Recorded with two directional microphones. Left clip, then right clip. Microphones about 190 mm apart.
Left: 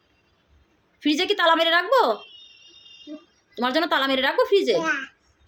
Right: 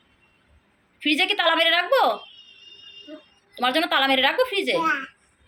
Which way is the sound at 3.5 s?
30° left (ahead or behind).